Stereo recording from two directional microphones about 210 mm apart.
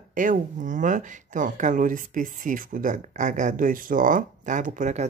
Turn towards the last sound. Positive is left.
turn(degrees=-35)  # may be behind; listen again after turning